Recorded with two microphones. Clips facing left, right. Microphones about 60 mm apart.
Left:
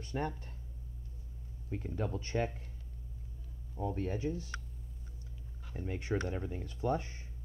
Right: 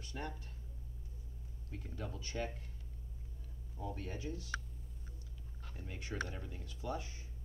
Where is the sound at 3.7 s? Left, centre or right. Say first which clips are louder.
Left 8 dB; left.